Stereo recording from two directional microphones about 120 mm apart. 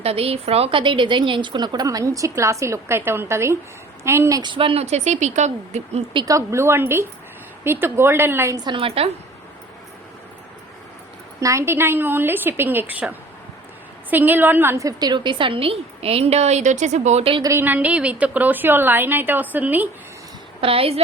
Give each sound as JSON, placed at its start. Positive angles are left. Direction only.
{"t": 0.0, "sound": "a woman's voice", "side_deg": -55}
{"t": 4.4, "sound": "a woman's voice", "side_deg": -45}
{"t": 6.2, "sound": "a woman's voice", "side_deg": -25}
{"t": 8.6, "sound": "a woman's voice", "side_deg": -45}
{"t": 11.3, "sound": "a woman's voice", "side_deg": -25}
{"t": 17.4, "sound": "a woman's voice", "side_deg": -20}
{"t": 20.6, "sound": "a woman's voice", "side_deg": -50}